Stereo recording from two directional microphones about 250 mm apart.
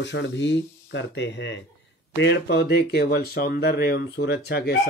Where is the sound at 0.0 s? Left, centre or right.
Left.